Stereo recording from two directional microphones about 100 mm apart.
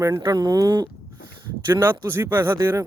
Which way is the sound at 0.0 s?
35° right (ahead or behind).